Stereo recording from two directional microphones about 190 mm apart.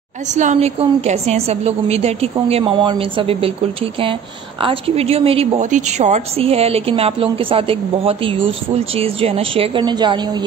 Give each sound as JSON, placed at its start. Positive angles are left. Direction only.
{"t": 0.3, "sound": "a woman's voice", "side_deg": -40}